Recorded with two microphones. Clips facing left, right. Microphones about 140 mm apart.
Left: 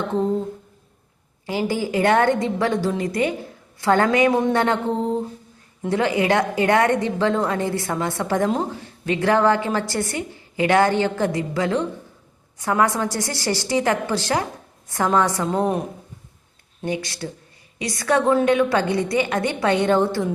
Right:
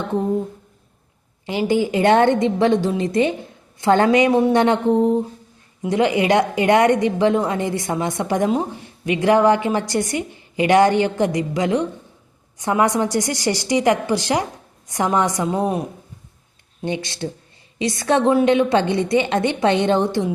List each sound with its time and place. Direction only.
1.5 s a woman's voice: 20° right (ahead or behind)
16.8 s a woman's voice: 25° right (ahead or behind)